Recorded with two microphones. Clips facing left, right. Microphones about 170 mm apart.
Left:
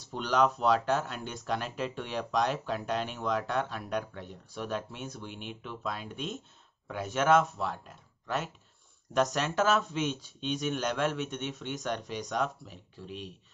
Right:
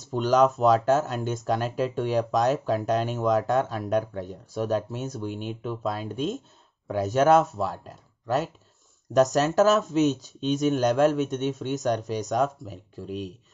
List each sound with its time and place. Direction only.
0.0 s speech: 45° right (ahead or behind)